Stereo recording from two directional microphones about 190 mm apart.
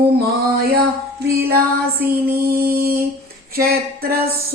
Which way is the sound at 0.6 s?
55° right (ahead or behind).